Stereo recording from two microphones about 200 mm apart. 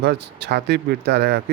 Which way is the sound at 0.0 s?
60° right (ahead or behind).